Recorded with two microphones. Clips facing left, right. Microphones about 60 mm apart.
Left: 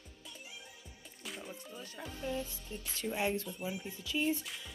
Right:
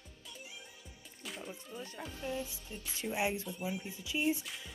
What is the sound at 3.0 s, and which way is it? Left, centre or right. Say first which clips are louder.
Speech: even; centre.